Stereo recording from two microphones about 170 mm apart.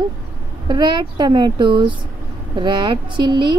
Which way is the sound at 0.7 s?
25° right (ahead or behind).